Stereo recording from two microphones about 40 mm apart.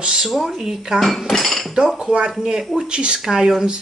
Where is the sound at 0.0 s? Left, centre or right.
Centre.